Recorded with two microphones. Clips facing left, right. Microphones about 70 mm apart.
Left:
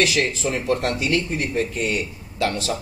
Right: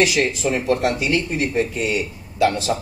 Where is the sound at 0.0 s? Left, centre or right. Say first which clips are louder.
Right 2 dB; centre.